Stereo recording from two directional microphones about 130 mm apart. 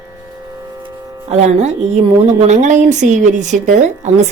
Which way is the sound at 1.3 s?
55° right (ahead or behind).